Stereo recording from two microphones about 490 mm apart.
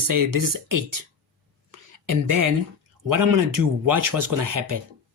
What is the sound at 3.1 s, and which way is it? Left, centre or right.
Speech, right.